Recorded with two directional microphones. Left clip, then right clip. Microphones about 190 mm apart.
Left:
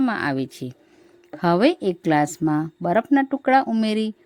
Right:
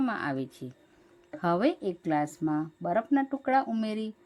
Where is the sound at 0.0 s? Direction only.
30° left (ahead or behind).